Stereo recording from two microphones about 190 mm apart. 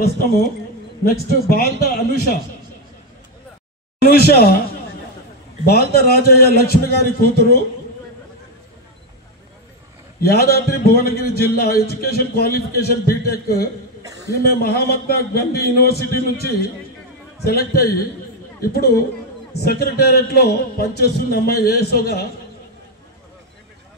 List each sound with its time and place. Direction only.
0.0 s a man's voice: 55° left (ahead or behind)
4.0 s a man's voice: 55° left (ahead or behind)
5.7 s a man's voice: 55° left (ahead or behind)
10.2 s a man's voice: 55° left (ahead or behind)
17.5 s a man's voice: 55° left (ahead or behind)